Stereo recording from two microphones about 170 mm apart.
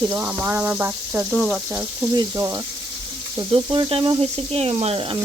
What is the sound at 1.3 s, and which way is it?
Stir, centre (ahead or behind).